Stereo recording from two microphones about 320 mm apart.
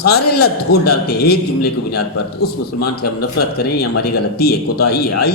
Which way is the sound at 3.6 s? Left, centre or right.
Left.